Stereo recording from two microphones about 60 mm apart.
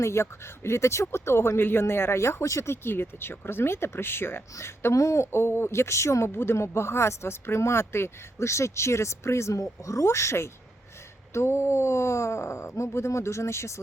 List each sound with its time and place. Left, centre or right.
0.0 s speech: left
6.3 s speech: left